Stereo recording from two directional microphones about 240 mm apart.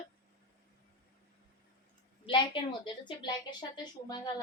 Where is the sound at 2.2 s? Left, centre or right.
Centre.